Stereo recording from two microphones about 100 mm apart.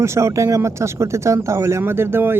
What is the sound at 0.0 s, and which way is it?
A woman's voice, 30° right (ahead or behind).